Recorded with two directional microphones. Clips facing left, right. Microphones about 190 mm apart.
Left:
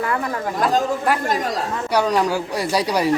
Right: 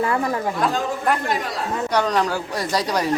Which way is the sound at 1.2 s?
45° left (ahead or behind).